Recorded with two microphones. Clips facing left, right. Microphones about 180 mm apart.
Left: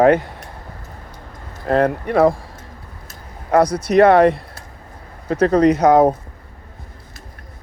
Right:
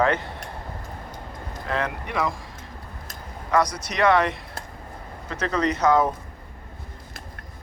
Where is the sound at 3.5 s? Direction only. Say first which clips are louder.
Left 8 dB; 60° left (ahead or behind).